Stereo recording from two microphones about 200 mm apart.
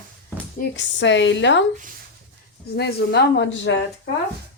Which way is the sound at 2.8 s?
60° left (ahead or behind).